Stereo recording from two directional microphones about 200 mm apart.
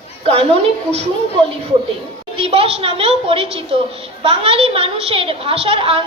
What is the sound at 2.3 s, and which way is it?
A woman's voice, 30° right (ahead or behind).